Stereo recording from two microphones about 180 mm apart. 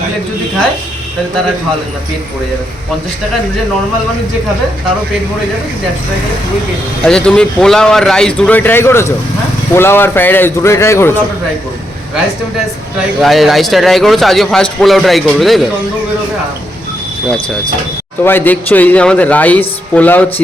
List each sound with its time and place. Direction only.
7.0 s a man's voice: 5° left (ahead or behind)
13.2 s a man's voice: centre (ahead or behind)
18.2 s speech: 10° left (ahead or behind)